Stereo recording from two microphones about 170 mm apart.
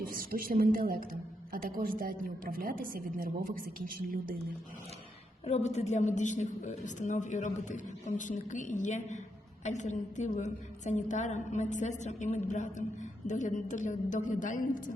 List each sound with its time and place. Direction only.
0.0 s a woman's voice: 55° right (ahead or behind)
5.5 s a woman's voice: 40° left (ahead or behind)